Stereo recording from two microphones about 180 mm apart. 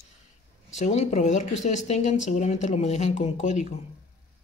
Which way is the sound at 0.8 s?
40° left (ahead or behind).